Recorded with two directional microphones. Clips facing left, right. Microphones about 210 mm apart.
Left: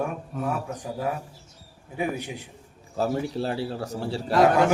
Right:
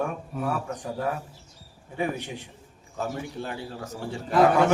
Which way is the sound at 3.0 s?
35° left (ahead or behind).